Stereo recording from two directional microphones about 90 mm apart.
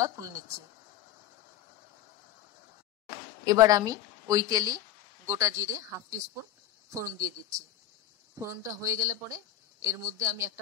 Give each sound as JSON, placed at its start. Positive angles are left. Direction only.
{"t": 0.0, "sound": "a woman's voice", "side_deg": -40}
{"t": 3.4, "sound": "a woman's voice", "side_deg": -45}